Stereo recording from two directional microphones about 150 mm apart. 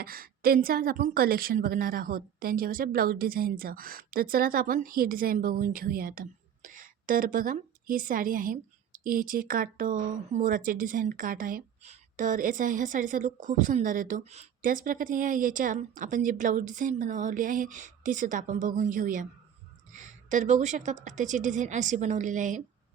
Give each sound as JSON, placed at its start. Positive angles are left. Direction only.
{"t": 0.0, "sound": "a woman's voice", "side_deg": -75}